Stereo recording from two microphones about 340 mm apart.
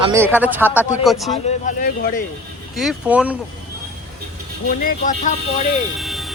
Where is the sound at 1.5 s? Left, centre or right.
Left.